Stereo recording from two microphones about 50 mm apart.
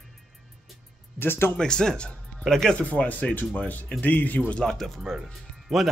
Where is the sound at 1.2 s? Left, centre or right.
Left.